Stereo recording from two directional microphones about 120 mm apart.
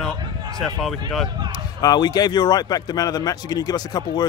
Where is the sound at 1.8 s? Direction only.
35° left (ahead or behind).